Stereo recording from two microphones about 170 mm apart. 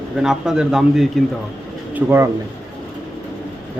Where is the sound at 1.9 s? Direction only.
15° right (ahead or behind).